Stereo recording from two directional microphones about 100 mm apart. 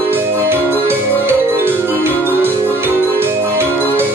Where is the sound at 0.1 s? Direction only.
20° right (ahead or behind).